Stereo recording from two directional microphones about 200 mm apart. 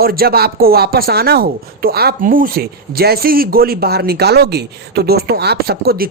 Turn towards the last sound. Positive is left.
turn(degrees=-50)  # may be behind; listen again after turning